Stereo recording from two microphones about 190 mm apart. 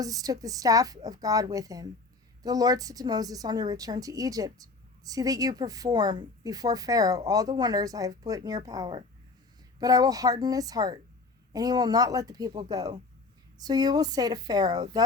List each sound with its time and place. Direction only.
0.0 s a woman's voice: 20° right (ahead or behind)